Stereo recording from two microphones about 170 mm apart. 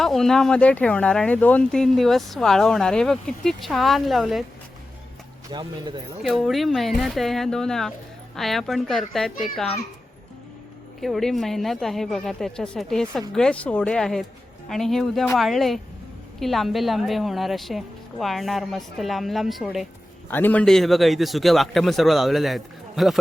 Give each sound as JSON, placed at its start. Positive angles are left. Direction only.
{"t": 0.0, "sound": "speech", "side_deg": 0}
{"t": 5.5, "sound": "speech", "side_deg": -25}
{"t": 6.2, "sound": "speech", "side_deg": 0}
{"t": 11.0, "sound": "speech", "side_deg": 0}
{"t": 20.3, "sound": "speech", "side_deg": 10}